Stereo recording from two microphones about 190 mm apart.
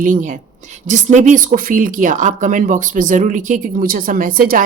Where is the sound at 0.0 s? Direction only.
45° right (ahead or behind).